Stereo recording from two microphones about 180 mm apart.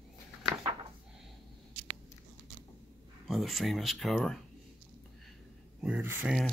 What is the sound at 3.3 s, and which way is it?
Speech, centre (ahead or behind).